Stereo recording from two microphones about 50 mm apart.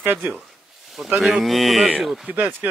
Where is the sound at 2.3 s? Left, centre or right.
Right.